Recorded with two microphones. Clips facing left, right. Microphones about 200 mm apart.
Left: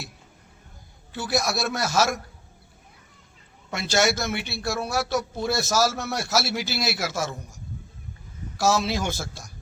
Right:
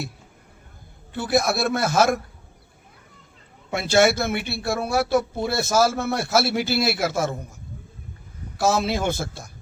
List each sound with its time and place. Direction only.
1.1 s a man's voice: 55° right (ahead or behind)
3.8 s a man's voice: 55° right (ahead or behind)
8.5 s a man's voice: 55° right (ahead or behind)